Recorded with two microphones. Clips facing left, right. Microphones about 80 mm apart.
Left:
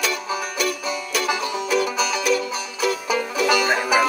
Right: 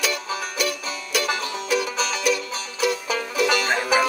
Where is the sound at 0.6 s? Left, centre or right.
Centre.